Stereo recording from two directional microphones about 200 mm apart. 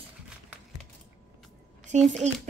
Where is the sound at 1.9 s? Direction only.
35° right (ahead or behind).